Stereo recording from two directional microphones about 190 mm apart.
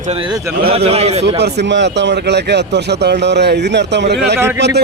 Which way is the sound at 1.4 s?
65° right (ahead or behind).